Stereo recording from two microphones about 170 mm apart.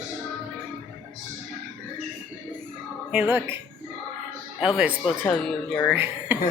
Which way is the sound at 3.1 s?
10° right (ahead or behind).